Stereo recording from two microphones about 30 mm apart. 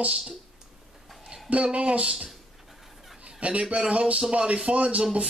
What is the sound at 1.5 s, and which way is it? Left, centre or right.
Speech, right.